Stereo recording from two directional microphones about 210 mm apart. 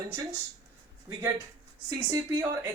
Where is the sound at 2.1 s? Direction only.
15° right (ahead or behind).